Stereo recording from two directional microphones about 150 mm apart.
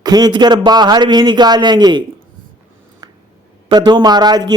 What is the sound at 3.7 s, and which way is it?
Speech, 30° right (ahead or behind).